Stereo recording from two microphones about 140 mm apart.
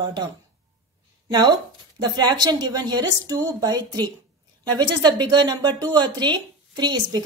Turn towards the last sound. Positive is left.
turn(degrees=-30)  # may be behind; listen again after turning